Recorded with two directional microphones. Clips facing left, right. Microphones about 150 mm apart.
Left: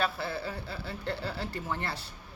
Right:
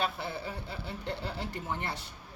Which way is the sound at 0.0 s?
20° right (ahead or behind).